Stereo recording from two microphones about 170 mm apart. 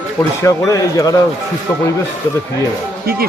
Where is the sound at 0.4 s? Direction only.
20° left (ahead or behind).